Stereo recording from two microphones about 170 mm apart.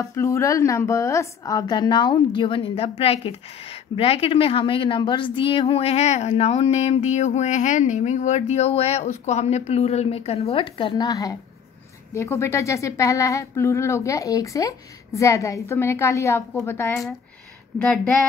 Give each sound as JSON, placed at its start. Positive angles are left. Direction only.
{"t": 0.0, "sound": "a woman's voice", "side_deg": 20}
{"t": 17.7, "sound": "speech", "side_deg": 0}